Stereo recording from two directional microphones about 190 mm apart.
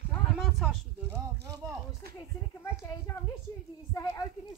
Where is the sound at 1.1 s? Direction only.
15° right (ahead or behind).